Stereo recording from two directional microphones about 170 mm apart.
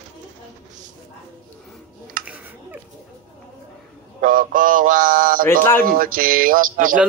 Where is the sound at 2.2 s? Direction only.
10° right (ahead or behind).